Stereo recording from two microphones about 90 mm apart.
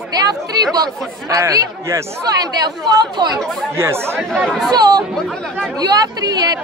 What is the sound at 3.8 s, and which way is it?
Speech, 30° right (ahead or behind).